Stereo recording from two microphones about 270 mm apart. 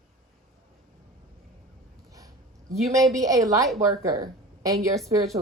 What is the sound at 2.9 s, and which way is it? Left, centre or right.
A woman's voice, centre.